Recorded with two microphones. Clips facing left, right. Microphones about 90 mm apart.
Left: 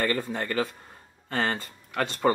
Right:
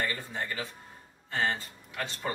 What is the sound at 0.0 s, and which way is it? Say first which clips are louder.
Speech: left 6 dB; 60° left (ahead or behind).